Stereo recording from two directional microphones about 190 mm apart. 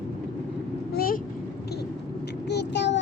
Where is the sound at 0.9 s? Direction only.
50° left (ahead or behind).